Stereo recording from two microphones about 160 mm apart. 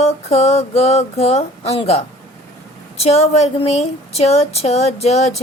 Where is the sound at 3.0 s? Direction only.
40° left (ahead or behind).